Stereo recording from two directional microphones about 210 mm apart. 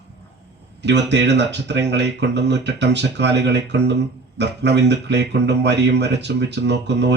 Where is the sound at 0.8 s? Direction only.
55° right (ahead or behind).